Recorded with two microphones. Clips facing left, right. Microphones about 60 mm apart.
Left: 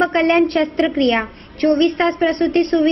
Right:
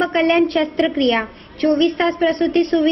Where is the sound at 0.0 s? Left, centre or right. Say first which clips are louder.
Left 1 dB; left.